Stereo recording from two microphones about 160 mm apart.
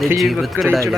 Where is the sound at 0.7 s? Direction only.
20° right (ahead or behind).